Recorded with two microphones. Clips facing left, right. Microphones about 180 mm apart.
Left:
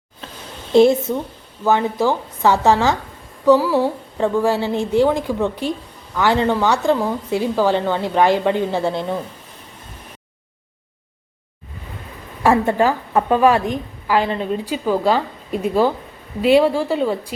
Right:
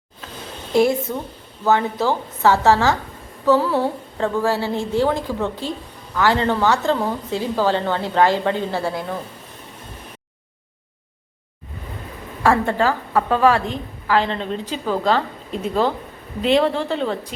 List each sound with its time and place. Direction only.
0.7 s a woman's voice: 25° left (ahead or behind)
1.6 s a woman's voice: 15° left (ahead or behind)
12.4 s a woman's voice: 15° left (ahead or behind)